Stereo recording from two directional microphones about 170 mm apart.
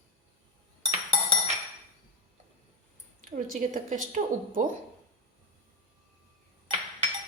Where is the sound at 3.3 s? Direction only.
50° right (ahead or behind).